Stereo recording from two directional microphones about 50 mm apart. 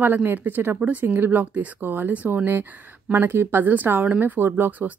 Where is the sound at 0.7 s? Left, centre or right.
Right.